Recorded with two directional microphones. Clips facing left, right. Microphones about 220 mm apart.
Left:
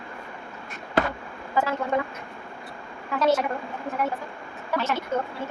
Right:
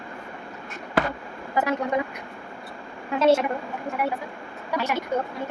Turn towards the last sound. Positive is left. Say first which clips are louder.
# even
turn(degrees=-15)  # may be behind; listen again after turning